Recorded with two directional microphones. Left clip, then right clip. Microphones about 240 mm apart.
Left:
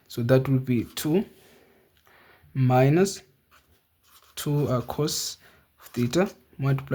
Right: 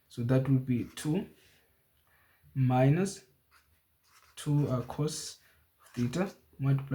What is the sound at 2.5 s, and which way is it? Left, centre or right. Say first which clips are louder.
Speech: left 8 dB; left.